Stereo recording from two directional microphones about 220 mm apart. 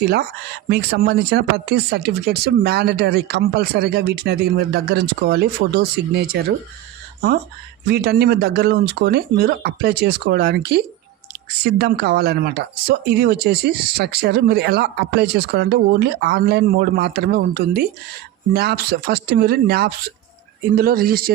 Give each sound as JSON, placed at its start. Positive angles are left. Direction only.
{"t": 0.0, "sound": "speech", "side_deg": -45}
{"t": 7.9, "sound": "speech", "side_deg": -45}